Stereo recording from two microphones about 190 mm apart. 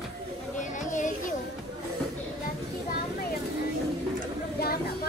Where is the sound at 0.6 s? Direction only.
40° left (ahead or behind).